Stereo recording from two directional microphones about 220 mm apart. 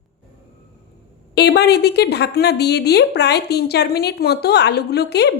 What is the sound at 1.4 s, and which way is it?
A woman's voice, 50° left (ahead or behind).